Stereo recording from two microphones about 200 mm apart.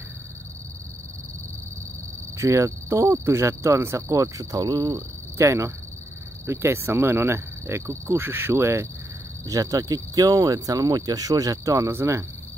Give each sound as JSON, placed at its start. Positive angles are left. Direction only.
{"t": 2.3, "sound": "speech", "side_deg": -15}